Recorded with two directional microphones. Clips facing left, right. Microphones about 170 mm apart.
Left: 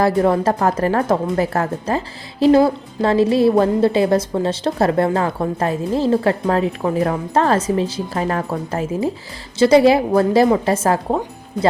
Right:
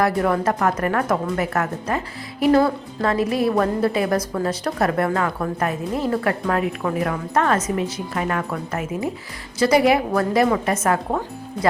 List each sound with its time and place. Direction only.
0.0 s a woman's voice: 30° left (ahead or behind)